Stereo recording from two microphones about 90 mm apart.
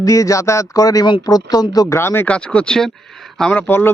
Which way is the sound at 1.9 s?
25° left (ahead or behind).